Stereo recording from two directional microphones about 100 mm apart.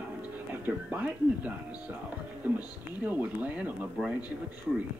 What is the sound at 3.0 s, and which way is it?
Speech, 15° right (ahead or behind).